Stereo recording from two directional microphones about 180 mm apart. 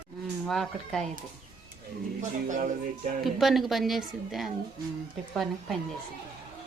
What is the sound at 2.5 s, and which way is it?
Music, 45° right (ahead or behind).